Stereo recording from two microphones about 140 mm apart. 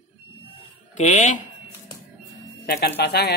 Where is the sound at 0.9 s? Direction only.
55° left (ahead or behind).